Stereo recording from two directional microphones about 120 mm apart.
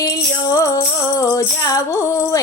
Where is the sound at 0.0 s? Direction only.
30° left (ahead or behind).